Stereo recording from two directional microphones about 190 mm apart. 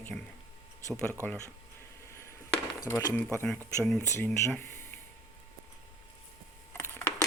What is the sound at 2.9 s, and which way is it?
Speech, 15° left (ahead or behind).